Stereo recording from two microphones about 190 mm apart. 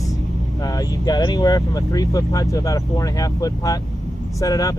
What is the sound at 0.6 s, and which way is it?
Speech, 20° left (ahead or behind).